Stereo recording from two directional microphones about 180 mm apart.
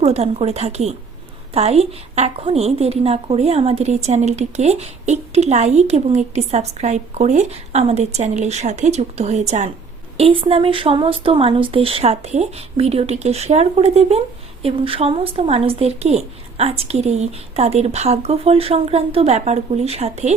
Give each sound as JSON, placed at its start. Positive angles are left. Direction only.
{"t": 0.0, "sound": "a woman's voice", "side_deg": -35}